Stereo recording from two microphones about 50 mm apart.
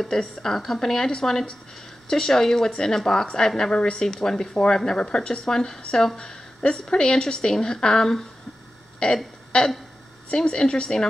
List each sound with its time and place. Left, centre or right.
0.0 s a woman's voice: centre
9.0 s speech: centre
10.3 s a woman's voice: centre